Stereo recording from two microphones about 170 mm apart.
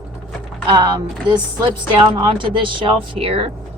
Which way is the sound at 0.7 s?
25° right (ahead or behind).